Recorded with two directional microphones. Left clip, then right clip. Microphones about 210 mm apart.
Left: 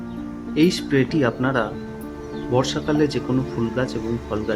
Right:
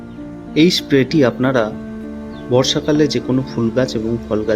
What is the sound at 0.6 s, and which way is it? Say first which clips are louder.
Speech: right 6 dB; 20° right (ahead or behind).